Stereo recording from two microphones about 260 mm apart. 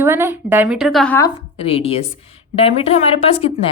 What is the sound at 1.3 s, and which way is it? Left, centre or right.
A woman's voice, left.